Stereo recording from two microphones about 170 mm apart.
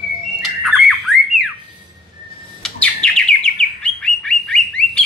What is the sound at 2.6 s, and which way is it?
Bird, 5° left (ahead or behind).